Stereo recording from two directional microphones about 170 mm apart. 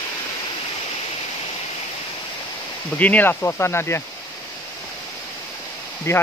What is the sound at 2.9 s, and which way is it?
Speech, 10° left (ahead or behind).